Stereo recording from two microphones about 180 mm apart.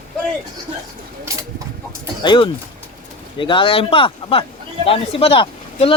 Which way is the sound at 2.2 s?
25° left (ahead or behind).